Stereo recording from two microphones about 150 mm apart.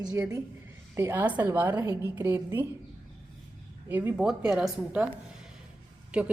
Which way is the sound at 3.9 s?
15° right (ahead or behind).